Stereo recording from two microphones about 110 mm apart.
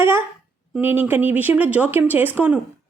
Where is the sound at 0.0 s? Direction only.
20° right (ahead or behind).